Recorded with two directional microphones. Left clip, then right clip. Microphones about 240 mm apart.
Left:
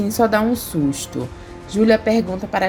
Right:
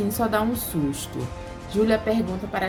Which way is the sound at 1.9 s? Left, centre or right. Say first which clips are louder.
Left 7 dB; left.